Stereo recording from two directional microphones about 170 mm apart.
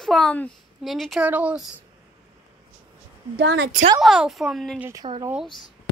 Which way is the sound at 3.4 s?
90° right.